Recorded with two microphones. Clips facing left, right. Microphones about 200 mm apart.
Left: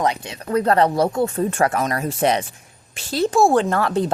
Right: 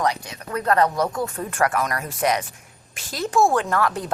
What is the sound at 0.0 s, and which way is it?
A woman's voice, 25° left (ahead or behind).